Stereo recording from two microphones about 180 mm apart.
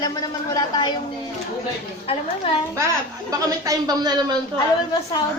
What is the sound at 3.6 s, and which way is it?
Speech, 20° right (ahead or behind).